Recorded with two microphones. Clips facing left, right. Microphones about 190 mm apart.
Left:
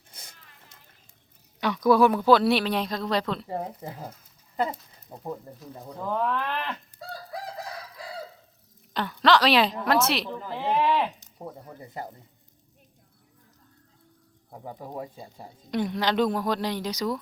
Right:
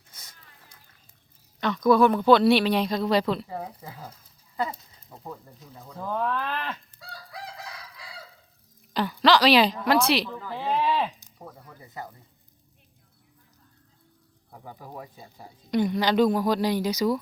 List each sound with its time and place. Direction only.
1.6 s speech: 10° left (ahead or behind)
3.5 s speech: 40° left (ahead or behind)
5.1 s speech: 35° left (ahead or behind)
5.5 s speech: 5° right (ahead or behind)
6.4 s speech: 15° left (ahead or behind)
7.0 s chicken: 45° left (ahead or behind)
8.9 s speech: 5° right (ahead or behind)
10.2 s speech: 20° left (ahead or behind)
11.4 s speech: 30° left (ahead or behind)
14.5 s speech: 30° left (ahead or behind)
15.7 s speech: centre (ahead or behind)